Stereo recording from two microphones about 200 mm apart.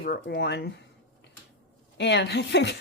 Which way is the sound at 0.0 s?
50° left (ahead or behind).